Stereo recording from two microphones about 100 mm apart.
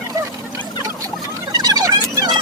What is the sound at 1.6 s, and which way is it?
Turkey, 40° right (ahead or behind).